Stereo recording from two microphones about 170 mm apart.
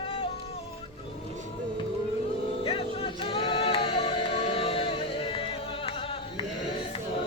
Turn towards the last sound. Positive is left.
turn(degrees=35)  # may be behind; listen again after turning